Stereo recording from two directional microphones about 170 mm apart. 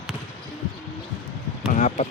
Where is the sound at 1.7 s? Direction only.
45° left (ahead or behind).